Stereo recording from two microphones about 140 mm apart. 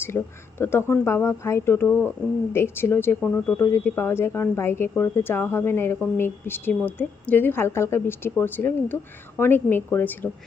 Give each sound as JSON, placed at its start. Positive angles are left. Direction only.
{"t": 0.1, "sound": "speech", "side_deg": 15}